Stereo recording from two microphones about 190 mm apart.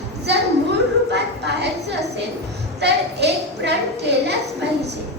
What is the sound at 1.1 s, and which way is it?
Speech, 65° right (ahead or behind).